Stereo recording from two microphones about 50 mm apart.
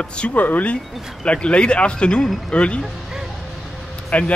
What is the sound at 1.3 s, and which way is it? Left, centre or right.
Speech, left.